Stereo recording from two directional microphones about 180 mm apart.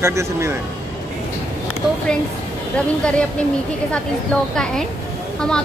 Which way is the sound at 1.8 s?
5° right (ahead or behind).